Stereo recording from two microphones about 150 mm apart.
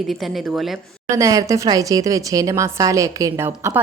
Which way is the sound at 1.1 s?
20° right (ahead or behind).